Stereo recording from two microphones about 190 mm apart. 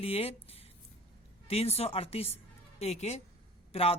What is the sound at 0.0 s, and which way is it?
A woman's voice, 30° left (ahead or behind).